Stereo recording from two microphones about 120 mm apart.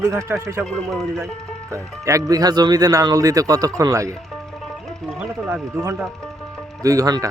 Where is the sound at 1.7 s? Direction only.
25° right (ahead or behind).